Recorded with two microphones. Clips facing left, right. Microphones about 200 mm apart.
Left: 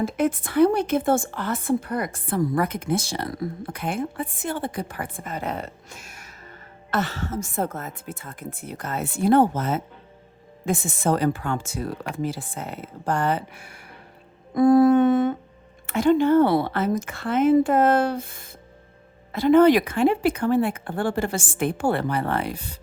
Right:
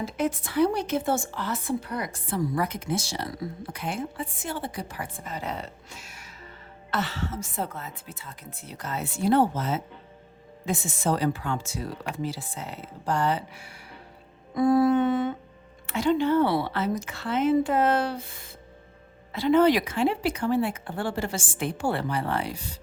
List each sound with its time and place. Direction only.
0.0 s a woman's voice: 55° left (ahead or behind)